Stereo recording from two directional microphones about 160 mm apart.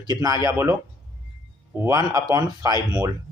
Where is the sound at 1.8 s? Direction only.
20° right (ahead or behind).